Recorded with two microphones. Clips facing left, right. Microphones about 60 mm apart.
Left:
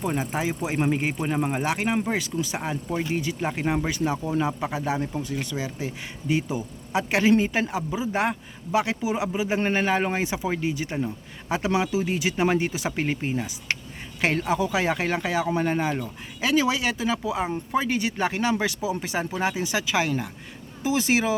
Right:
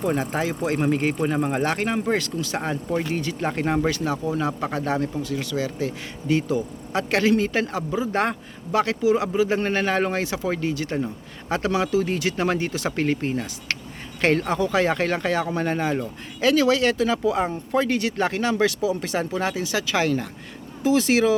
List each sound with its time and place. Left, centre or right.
0.2 s speech: centre
2.6 s speech: centre
5.2 s speech: left; by 21.3 s centre